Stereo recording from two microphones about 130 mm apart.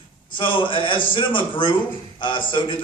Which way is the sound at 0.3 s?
40° left (ahead or behind).